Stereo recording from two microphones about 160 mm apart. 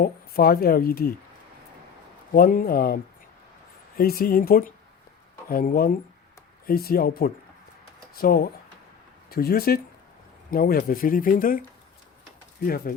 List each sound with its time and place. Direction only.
0.0 s speech: 70° left (ahead or behind)
2.3 s speech: 65° left (ahead or behind)
12.6 s speech: 65° left (ahead or behind)